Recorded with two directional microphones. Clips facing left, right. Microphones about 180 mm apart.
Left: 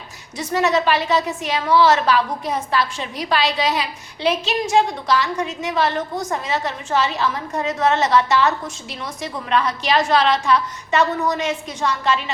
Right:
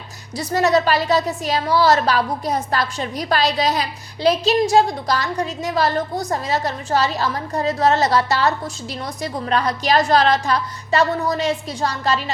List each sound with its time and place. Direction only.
0.3 s a woman's voice: 40° right (ahead or behind)